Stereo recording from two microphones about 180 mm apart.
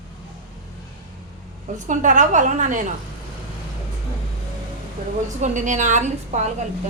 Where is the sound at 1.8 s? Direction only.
45° right (ahead or behind).